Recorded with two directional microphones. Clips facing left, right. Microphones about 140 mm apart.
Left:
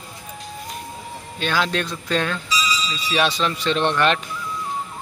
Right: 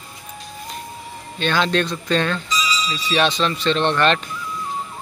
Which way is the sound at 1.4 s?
5° left (ahead or behind).